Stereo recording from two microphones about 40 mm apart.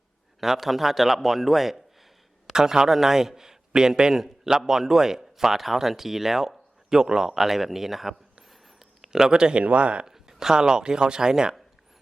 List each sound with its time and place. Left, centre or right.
0.3 s a man's voice: centre
2.5 s a man's voice: centre
9.6 s speech: right
10.1 s speech: centre